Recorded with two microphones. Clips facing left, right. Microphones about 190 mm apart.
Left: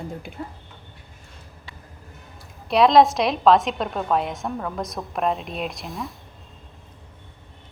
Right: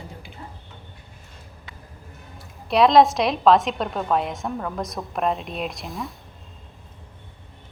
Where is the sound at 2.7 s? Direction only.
Centre (ahead or behind).